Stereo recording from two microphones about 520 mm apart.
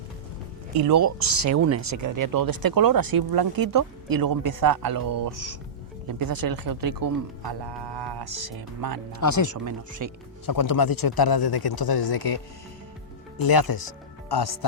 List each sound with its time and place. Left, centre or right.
0.8 s speech: right
1.5 s speech: right
9.2 s speech: left
9.5 s speech: right
10.4 s speech: left
13.4 s speech: left